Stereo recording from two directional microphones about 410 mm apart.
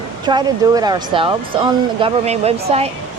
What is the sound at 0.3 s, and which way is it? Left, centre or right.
Speech, centre.